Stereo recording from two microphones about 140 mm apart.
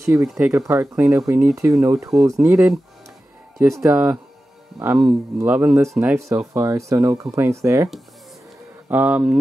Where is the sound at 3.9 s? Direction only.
10° right (ahead or behind).